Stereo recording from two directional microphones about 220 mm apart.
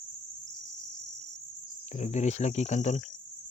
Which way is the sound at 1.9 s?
30° left (ahead or behind).